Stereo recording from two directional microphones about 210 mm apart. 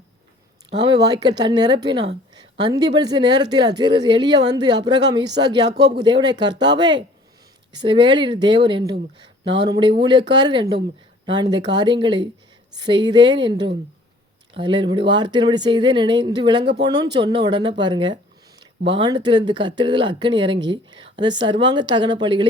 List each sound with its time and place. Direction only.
0.8 s a woman's voice: 20° right (ahead or behind)
5.6 s speech: 50° right (ahead or behind)
6.0 s a woman's voice: 20° right (ahead or behind)